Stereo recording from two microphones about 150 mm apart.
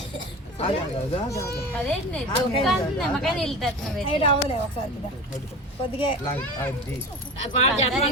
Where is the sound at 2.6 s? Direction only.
5° left (ahead or behind).